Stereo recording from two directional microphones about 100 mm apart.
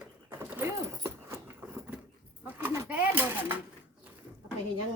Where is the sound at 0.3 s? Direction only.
25° right (ahead or behind).